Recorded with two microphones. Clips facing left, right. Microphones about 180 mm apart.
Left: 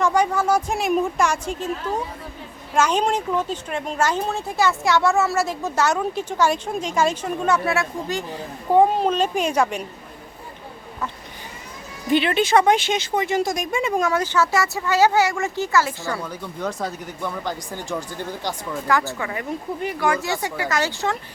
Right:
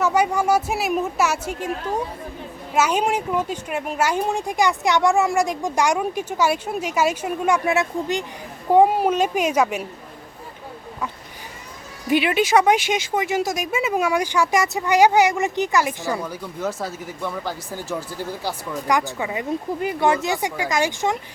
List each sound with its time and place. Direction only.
0.0 s speech: 10° right (ahead or behind)
12.0 s speech: 10° right (ahead or behind)
18.7 s speech: 15° right (ahead or behind)